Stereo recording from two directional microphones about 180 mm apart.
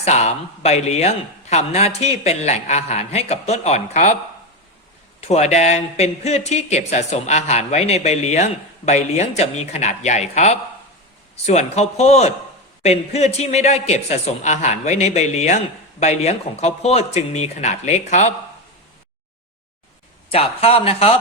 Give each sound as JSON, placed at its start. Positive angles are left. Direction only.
{"t": 0.0, "sound": "a man's voice", "side_deg": 40}
{"t": 5.3, "sound": "a man's voice", "side_deg": 40}
{"t": 20.3, "sound": "a man's voice", "side_deg": 35}